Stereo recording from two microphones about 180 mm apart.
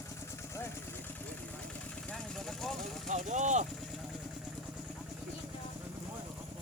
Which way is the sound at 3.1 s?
40° right (ahead or behind).